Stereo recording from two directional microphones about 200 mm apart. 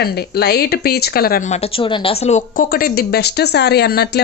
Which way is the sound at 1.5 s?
30° left (ahead or behind).